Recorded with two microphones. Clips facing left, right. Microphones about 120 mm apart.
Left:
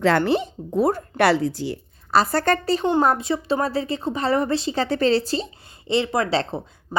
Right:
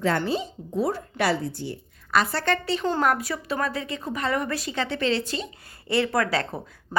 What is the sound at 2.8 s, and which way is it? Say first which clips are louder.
A woman's voice: left 4 dB; 25° left (ahead or behind).